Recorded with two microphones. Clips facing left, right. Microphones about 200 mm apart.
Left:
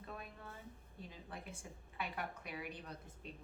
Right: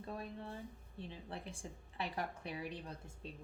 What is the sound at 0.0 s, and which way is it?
A woman's voice, 30° right (ahead or behind).